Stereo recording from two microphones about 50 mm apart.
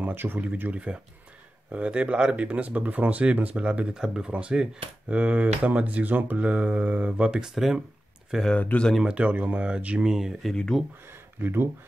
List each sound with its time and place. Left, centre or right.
0.0 s speech: right
0.4 s speech: right
7.4 s speech: centre
8.5 s speech: left
9.0 s speech: right
10.0 s speech: centre
11.4 s speech: right